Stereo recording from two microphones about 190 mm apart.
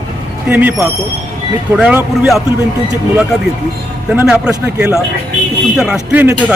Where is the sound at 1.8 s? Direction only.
5° right (ahead or behind).